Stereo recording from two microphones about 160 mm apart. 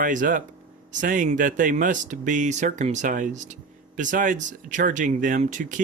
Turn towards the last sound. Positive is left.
turn(degrees=-50)  # may be behind; listen again after turning